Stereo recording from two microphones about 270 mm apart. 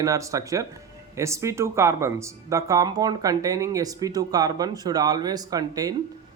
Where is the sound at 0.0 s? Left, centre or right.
Centre.